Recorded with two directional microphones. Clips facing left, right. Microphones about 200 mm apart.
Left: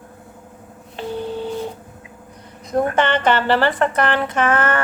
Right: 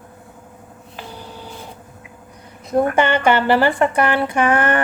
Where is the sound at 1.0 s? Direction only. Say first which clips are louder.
Left 9 dB; 25° left (ahead or behind).